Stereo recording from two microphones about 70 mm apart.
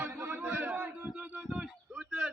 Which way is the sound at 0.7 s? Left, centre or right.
Centre.